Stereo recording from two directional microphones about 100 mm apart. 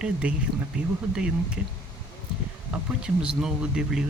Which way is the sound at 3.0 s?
10° right (ahead or behind).